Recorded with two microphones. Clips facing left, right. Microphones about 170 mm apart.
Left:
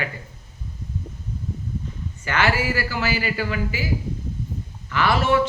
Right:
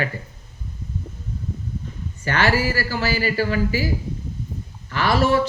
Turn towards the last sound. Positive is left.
turn(degrees=-35)  # may be behind; listen again after turning